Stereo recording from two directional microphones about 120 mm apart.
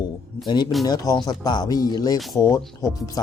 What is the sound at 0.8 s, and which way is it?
Speech, 35° left (ahead or behind).